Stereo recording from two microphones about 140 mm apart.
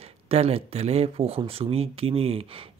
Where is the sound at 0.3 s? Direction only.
45° right (ahead or behind).